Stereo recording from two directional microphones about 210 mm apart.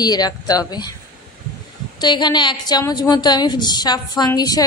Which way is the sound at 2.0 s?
20° left (ahead or behind).